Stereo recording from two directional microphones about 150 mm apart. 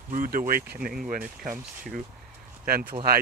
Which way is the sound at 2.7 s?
80° right.